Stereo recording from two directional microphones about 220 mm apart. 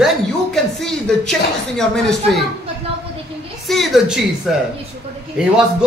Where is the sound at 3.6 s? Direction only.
Centre (ahead or behind).